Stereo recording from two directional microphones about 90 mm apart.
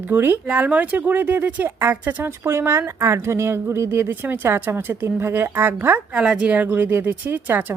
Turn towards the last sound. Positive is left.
turn(degrees=-20)  # may be behind; listen again after turning